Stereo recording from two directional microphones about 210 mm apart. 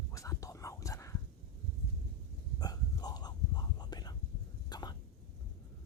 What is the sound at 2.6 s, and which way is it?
Whispering, 20° left (ahead or behind).